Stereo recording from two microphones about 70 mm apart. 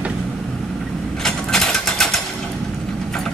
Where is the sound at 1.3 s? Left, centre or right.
Centre.